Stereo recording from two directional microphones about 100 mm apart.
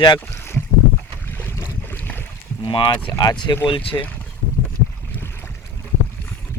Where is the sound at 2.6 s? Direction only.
55° left (ahead or behind).